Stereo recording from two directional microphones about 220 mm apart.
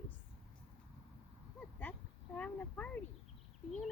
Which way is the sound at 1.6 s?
10° left (ahead or behind).